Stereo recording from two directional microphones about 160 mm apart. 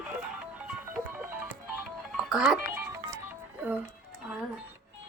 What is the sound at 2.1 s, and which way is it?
Music, centre (ahead or behind).